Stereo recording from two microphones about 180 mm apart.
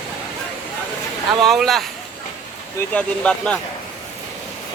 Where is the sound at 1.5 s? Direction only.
Centre (ahead or behind).